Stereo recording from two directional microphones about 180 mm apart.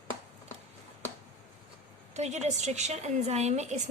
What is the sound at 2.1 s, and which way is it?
A woman's voice, 40° right (ahead or behind).